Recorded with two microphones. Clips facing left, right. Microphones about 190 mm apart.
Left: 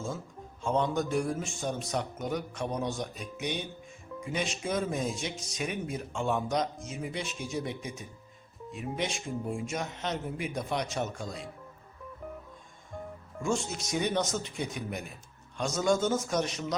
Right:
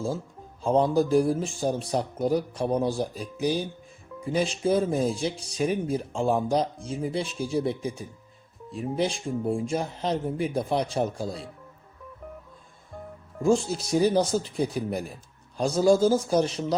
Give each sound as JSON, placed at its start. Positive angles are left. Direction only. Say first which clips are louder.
{"t": 0.6, "sound": "speech", "louder": "right 7 dB", "side_deg": -35}
{"t": 13.4, "sound": "speech", "louder": "right 8 dB", "side_deg": -35}